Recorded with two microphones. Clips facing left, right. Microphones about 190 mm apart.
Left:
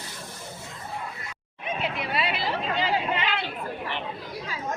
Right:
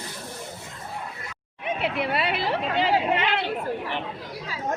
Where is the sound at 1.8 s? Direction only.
60° right (ahead or behind).